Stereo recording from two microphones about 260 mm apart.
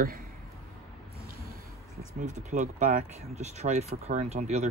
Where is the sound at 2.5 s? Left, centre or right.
Right.